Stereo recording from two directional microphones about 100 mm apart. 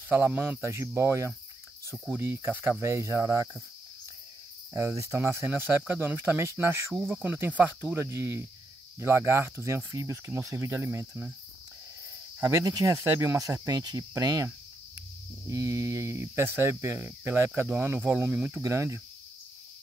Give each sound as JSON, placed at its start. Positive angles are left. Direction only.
{"t": 0.1, "sound": "speech", "side_deg": -20}
{"t": 4.7, "sound": "speech", "side_deg": -30}
{"t": 7.1, "sound": "speech", "side_deg": -10}
{"t": 12.4, "sound": "speech", "side_deg": -35}
{"t": 13.7, "sound": "speech", "side_deg": -40}
{"t": 18.6, "sound": "speech", "side_deg": -30}